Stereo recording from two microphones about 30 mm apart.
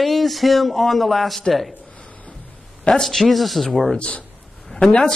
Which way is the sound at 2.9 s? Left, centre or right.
Centre.